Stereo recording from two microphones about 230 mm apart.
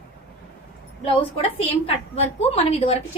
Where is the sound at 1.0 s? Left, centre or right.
Left.